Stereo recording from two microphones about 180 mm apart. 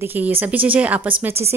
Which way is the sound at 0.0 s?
10° right (ahead or behind).